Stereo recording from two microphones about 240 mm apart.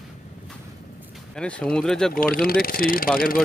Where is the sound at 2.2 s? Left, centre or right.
Left.